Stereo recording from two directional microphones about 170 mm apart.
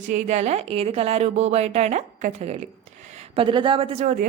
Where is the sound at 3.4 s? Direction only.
30° right (ahead or behind).